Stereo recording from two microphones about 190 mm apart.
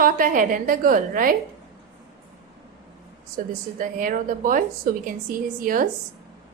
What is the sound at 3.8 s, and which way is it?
A woman's voice, 45° right (ahead or behind).